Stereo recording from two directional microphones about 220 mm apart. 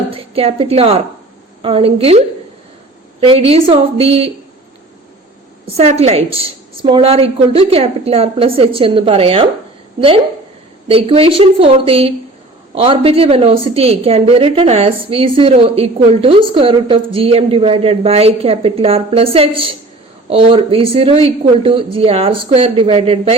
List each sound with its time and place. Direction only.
0.1 s a woman's voice: 25° right (ahead or behind)
5.7 s a woman's voice: 30° right (ahead or behind)
10.8 s a woman's voice: 25° right (ahead or behind)